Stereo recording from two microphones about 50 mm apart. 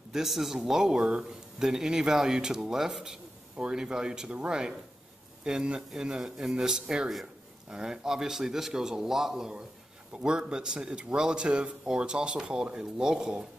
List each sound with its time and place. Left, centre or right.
0.1 s speech: centre
10.1 s speech: centre